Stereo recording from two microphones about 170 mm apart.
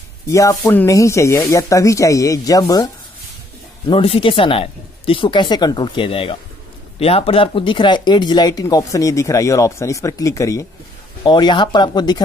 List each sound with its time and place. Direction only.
0.3 s speech: 20° left (ahead or behind)
3.8 s speech: 30° left (ahead or behind)